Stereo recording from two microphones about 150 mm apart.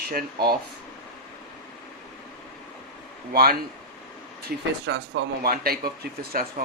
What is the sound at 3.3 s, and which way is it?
Speech, 90° right.